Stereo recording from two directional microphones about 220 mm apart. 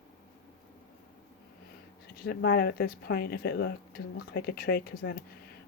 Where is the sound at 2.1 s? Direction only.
45° left (ahead or behind).